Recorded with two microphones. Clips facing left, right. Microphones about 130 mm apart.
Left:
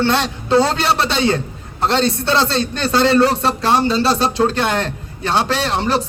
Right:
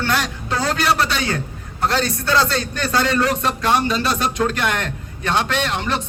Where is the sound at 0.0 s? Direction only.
25° left (ahead or behind).